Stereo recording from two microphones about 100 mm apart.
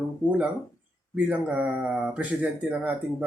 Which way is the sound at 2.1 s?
15° right (ahead or behind).